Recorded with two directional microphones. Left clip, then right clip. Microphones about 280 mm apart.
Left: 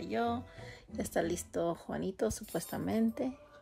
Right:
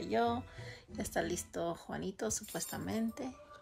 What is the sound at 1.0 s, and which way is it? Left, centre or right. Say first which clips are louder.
Speech: left 3 dB; left.